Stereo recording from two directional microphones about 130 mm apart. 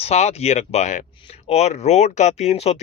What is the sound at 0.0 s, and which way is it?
Speech, 55° left (ahead or behind).